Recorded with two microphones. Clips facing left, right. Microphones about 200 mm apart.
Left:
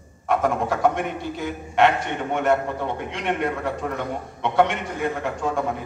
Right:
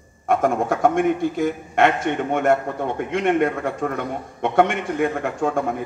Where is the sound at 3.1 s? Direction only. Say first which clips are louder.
Right 8 dB; 50° right (ahead or behind).